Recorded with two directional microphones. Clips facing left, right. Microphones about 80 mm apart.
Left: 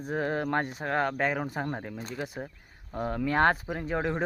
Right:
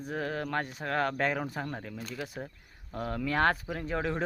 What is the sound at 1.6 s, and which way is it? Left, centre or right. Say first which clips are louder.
Speech: left 4 dB; left.